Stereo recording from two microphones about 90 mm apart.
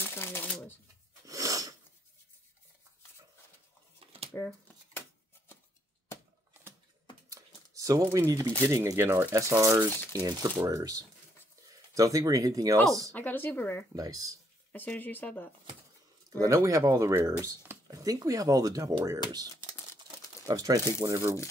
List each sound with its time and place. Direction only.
0.0 s shuffling cards: 25° left (ahead or behind)
1.2 s a sound: 40° right (ahead or behind)
4.0 s a sound: 90° right
7.2 s a sound: 40° right (ahead or behind)
8.6 s speech: 35° right (ahead or behind)
10.1 s speech: 45° right (ahead or behind)
13.1 s speech: 20° left (ahead or behind)
13.9 s speech: 45° right (ahead or behind)
14.7 s speech: 20° left (ahead or behind)
16.3 s speech: 40° right (ahead or behind)
20.4 s speech: 40° right (ahead or behind)